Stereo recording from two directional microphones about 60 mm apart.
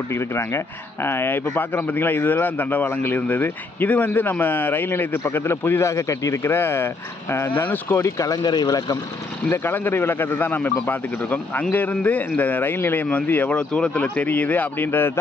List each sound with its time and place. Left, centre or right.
0.1 s a man's voice: left
8.0 s speech: left
9.5 s a man's voice: left